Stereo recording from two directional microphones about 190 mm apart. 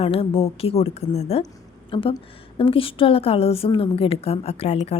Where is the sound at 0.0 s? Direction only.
30° left (ahead or behind).